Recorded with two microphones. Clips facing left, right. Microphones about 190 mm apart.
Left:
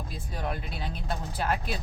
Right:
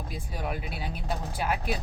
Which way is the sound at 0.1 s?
10° right (ahead or behind).